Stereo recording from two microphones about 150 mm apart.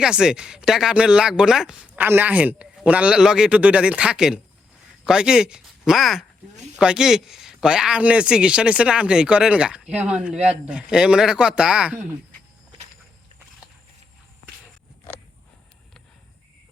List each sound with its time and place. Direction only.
0.0 s speech: 5° right (ahead or behind)